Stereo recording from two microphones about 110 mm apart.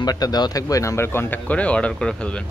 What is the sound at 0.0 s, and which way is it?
Speech, 35° left (ahead or behind).